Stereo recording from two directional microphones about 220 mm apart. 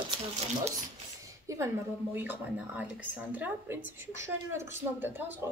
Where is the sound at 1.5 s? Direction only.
15° right (ahead or behind).